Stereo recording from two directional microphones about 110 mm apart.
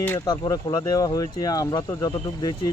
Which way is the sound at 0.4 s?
35° left (ahead or behind).